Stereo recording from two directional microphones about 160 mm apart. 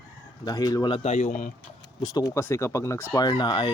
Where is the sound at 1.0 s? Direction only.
45° left (ahead or behind).